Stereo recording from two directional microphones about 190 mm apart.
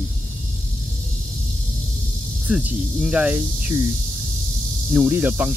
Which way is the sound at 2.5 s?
5° right (ahead or behind).